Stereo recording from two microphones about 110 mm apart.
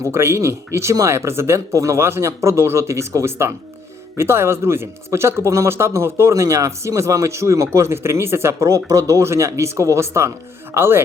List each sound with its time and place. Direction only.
0.0 s speech: 25° right (ahead or behind)